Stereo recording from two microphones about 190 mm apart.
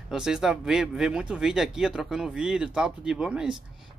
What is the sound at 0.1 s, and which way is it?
Speech, 5° right (ahead or behind).